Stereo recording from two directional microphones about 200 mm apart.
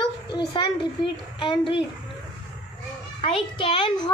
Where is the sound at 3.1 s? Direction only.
25° left (ahead or behind).